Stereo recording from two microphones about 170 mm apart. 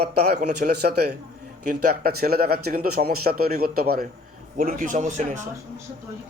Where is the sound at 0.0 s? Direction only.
70° right (ahead or behind).